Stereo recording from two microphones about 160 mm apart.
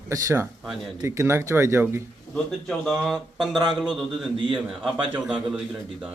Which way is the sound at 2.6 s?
Centre (ahead or behind).